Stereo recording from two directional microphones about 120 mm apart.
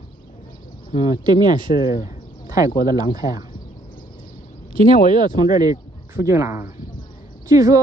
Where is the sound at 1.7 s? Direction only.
90° left.